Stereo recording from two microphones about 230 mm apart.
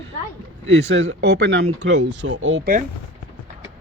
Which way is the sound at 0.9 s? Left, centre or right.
Right.